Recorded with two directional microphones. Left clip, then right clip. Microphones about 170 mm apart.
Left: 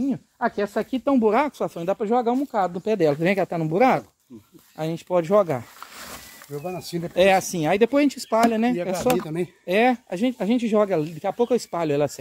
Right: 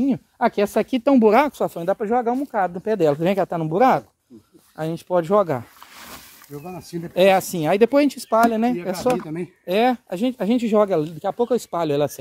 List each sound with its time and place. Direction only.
0.0 s speech: 85° right; by 1.5 s 50° right (ahead or behind)
1.6 s speech: 25° right (ahead or behind)
2.0 s speech: 10° right (ahead or behind); by 5.6 s 25° right (ahead or behind)
6.6 s speech: 50° left (ahead or behind)
7.2 s speech: 30° right (ahead or behind)
9.0 s speech: 60° left (ahead or behind)
9.7 s speech: 15° right (ahead or behind)